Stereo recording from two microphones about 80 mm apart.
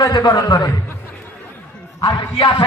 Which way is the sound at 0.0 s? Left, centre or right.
Left.